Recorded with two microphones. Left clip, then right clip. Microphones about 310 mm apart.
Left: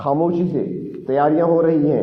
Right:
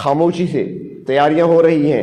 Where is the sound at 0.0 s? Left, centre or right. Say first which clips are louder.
Right 3 dB; right.